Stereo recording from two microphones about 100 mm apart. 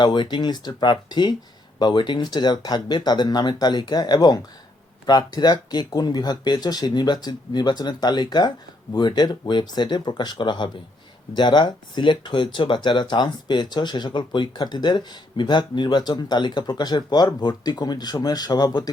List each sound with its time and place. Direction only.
0.0 s speech: 50° left (ahead or behind)